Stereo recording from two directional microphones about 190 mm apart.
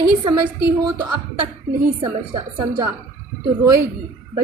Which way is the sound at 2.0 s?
25° right (ahead or behind).